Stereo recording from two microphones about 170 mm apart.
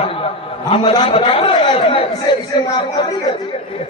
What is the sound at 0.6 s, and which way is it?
A man's voice, 30° left (ahead or behind).